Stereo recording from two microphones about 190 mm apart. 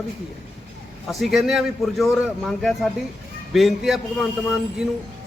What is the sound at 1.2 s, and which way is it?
A man's voice, centre (ahead or behind).